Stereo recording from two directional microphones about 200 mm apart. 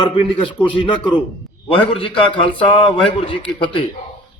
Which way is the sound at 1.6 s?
25° left (ahead or behind).